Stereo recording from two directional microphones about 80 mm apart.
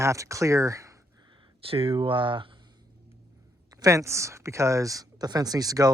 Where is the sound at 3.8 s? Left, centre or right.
Right.